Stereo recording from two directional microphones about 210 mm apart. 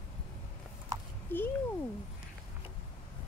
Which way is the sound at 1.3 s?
10° left (ahead or behind).